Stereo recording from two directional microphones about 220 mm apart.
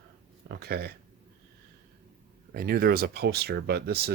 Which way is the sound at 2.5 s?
40° right (ahead or behind).